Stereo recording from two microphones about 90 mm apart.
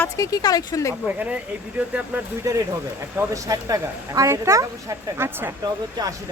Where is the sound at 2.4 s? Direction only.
35° right (ahead or behind).